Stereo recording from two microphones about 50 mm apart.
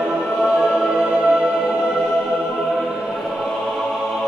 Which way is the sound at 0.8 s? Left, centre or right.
Centre.